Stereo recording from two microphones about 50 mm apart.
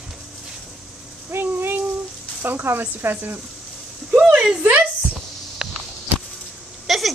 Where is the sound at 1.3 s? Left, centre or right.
Right.